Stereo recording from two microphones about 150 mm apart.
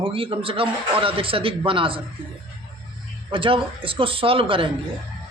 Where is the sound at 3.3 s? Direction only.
35° right (ahead or behind).